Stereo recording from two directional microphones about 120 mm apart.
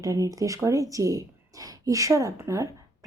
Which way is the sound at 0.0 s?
30° right (ahead or behind).